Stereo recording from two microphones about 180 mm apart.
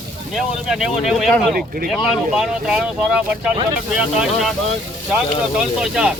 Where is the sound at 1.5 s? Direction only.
55° right (ahead or behind).